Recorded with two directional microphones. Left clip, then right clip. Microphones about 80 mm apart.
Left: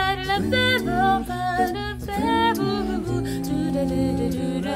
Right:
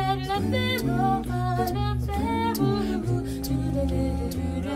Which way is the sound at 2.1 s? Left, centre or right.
Left.